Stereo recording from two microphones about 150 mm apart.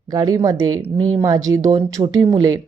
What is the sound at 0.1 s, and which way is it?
Speech, 25° right (ahead or behind).